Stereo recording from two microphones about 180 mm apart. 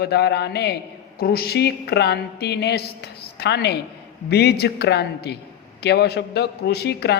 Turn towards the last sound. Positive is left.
turn(degrees=65)  # may be behind; listen again after turning